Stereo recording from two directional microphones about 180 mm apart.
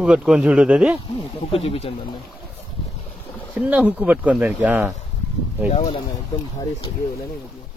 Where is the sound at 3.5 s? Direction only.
10° right (ahead or behind).